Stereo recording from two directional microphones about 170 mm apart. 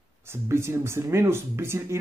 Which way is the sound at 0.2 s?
15° right (ahead or behind).